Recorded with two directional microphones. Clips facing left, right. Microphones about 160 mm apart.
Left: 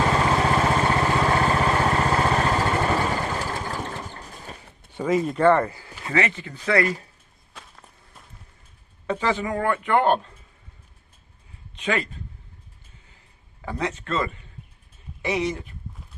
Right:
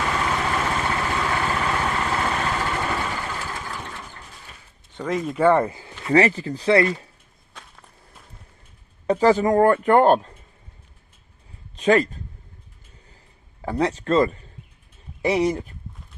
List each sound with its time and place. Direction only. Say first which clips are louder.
0.0 s vehicle: left 4 dB; 35° left (ahead or behind)
4.9 s speech: left 3 dB; 5° left (ahead or behind); by 5.9 s 20° right (ahead or behind)
6.1 s speech: right 7 dB; 35° right (ahead or behind)
7.5 s walk: even; centre (ahead or behind)
9.0 s speech: right 8 dB; 40° right (ahead or behind)
11.8 s speech: right 8 dB; 40° right (ahead or behind)
13.6 s speech: right 6 dB; 35° right (ahead or behind)